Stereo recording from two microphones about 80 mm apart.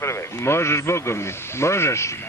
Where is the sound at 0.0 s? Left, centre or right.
Left.